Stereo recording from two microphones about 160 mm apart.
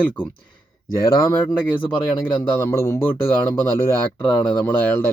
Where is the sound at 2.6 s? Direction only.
15° left (ahead or behind).